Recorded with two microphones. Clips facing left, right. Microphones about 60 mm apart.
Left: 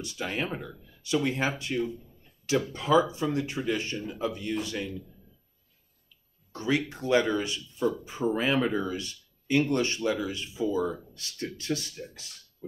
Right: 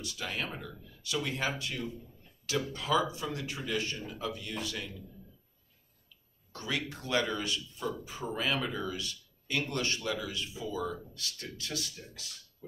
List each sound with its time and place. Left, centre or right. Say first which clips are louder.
0.0 s speech: left 5 dB; left
6.5 s speech: left 8 dB; left